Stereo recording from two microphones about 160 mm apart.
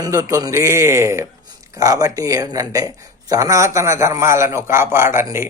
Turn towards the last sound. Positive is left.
turn(degrees=-15)  # may be behind; listen again after turning